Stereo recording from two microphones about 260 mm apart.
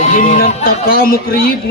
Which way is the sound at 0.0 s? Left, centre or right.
Left.